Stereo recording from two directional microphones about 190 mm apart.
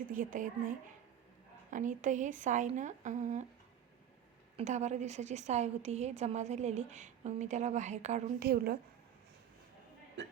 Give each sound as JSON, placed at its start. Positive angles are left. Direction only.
{"t": 0.1, "sound": "speech", "side_deg": -45}
{"t": 1.7, "sound": "a woman's voice", "side_deg": -40}
{"t": 4.5, "sound": "a woman's voice", "side_deg": -35}
{"t": 8.4, "sound": "speech", "side_deg": -55}